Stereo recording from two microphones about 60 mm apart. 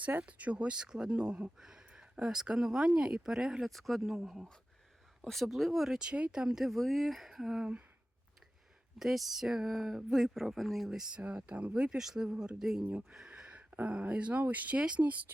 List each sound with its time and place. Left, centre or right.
0.1 s speech: right; by 3.7 s centre
3.7 s speech: centre
9.0 s speech: centre
11.1 s speech: centre
11.7 s speech: centre
12.8 s speech: right
13.1 s a sound: centre
14.1 s speech: right
14.8 s speech: centre